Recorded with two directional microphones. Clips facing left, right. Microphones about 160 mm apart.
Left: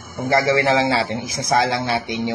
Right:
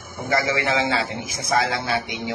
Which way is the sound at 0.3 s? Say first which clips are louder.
Left 5 dB; 35° left (ahead or behind).